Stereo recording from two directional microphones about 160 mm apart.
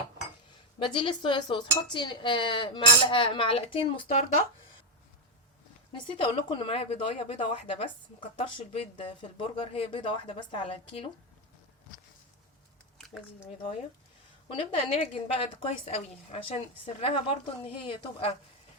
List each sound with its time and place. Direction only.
0.8 s cutlery: 30° left (ahead or behind)
5.9 s cutlery: 30° left (ahead or behind)
14.5 s cutlery: 35° left (ahead or behind)